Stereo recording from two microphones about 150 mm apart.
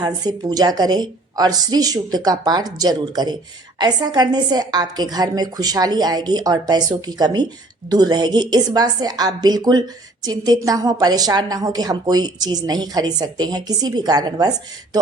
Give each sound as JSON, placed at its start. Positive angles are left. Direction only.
{"t": 0.0, "sound": "a woman's voice", "side_deg": -25}